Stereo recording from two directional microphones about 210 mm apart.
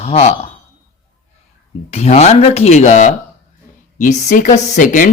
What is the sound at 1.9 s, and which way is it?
Speech, 30° left (ahead or behind).